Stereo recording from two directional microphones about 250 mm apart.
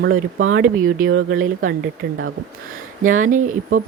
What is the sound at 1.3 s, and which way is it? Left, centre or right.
Speech, right.